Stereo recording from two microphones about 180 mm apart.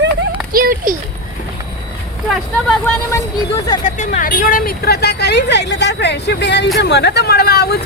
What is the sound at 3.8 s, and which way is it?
Speech, 45° left (ahead or behind).